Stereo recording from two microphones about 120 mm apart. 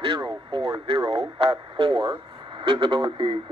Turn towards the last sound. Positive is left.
turn(degrees=-45)  # may be behind; listen again after turning